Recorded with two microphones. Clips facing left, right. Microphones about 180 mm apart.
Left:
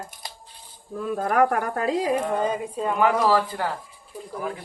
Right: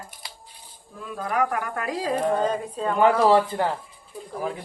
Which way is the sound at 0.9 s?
45° left (ahead or behind).